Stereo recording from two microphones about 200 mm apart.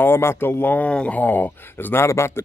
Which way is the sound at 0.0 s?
10° left (ahead or behind).